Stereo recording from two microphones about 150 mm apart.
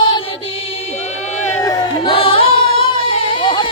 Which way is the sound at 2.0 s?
35° left (ahead or behind).